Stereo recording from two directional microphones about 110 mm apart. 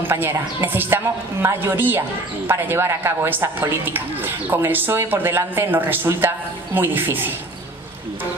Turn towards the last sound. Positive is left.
turn(degrees=-20)  # may be behind; listen again after turning